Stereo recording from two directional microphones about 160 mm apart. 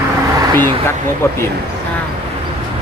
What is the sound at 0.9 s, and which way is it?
Speech, 15° left (ahead or behind).